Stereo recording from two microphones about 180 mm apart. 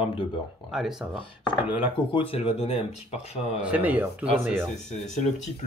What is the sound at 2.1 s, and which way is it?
Speech, 30° left (ahead or behind).